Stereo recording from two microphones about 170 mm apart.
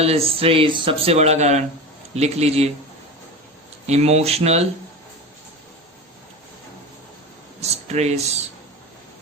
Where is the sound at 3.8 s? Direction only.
40° right (ahead or behind).